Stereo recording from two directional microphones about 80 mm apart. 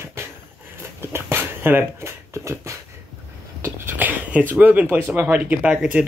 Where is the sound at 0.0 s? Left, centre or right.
Right.